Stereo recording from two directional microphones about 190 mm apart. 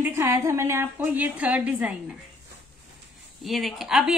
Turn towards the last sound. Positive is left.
turn(degrees=0)  # may be behind; listen again after turning